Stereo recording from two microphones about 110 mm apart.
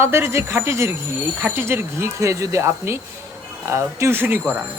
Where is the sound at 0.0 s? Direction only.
25° right (ahead or behind).